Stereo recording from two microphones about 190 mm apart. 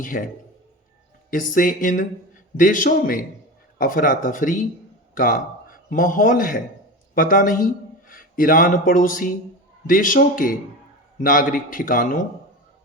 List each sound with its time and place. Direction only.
0.0 s a man's voice: 45° left (ahead or behind)
1.3 s a man's voice: 45° left (ahead or behind)